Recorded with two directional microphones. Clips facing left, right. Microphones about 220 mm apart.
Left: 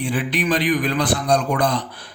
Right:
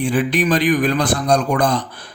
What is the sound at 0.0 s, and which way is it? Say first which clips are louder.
Speech: right 5 dB; 45° right (ahead or behind).